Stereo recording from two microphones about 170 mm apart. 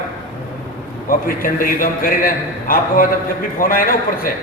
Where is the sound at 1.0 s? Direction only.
55° left (ahead or behind).